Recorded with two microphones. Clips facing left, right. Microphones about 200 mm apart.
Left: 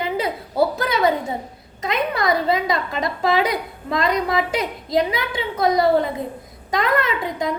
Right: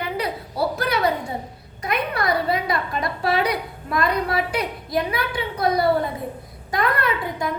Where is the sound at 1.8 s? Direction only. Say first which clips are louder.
Left 2 dB; 20° left (ahead or behind).